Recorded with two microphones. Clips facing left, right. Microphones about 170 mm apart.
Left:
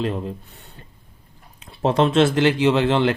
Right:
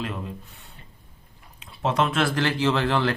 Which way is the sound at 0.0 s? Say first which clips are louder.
Left 7 dB; 35° left (ahead or behind).